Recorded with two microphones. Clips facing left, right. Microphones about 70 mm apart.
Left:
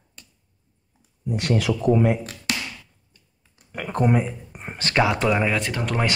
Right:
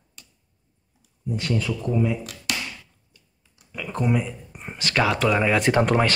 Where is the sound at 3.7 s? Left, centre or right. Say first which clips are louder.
Left 3 dB; left.